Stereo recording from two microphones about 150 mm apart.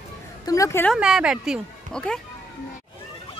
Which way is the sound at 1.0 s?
5° right (ahead or behind).